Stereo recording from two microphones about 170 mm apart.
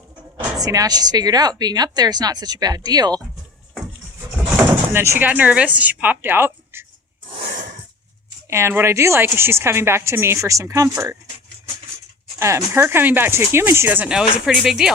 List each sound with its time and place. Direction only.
0.6 s a woman's voice: 20° right (ahead or behind)
4.5 s speech: 15° right (ahead or behind)
7.3 s a sound: 35° right (ahead or behind)
8.4 s a woman's voice: 15° right (ahead or behind)
12.4 s a woman's voice: 15° right (ahead or behind)